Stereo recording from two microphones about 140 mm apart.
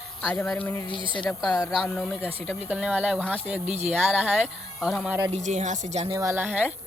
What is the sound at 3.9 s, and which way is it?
Speech, 10° right (ahead or behind).